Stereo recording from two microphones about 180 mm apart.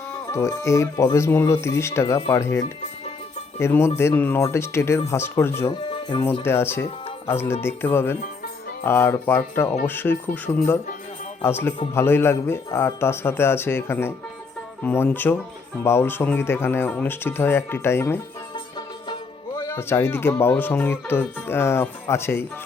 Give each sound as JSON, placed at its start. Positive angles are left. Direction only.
{"t": 0.3, "sound": "speech", "side_deg": 15}
{"t": 3.6, "sound": "speech", "side_deg": 15}
{"t": 5.9, "sound": "music", "side_deg": 25}
{"t": 6.4, "sound": "speech", "side_deg": 15}
{"t": 19.5, "sound": "speech", "side_deg": 15}